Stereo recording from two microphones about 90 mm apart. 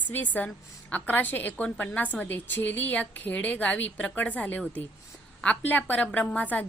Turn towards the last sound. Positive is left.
turn(degrees=15)  # may be behind; listen again after turning